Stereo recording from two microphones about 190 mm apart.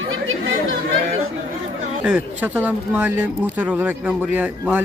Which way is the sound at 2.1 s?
10° right (ahead or behind).